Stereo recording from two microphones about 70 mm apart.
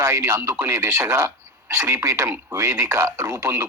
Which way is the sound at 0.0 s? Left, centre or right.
Right.